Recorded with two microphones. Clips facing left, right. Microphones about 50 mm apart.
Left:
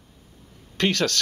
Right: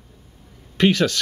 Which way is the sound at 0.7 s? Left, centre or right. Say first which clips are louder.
Right 5 dB; centre.